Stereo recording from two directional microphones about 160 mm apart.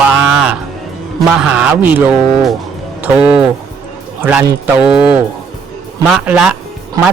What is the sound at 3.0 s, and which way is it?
Speech, 10° right (ahead or behind).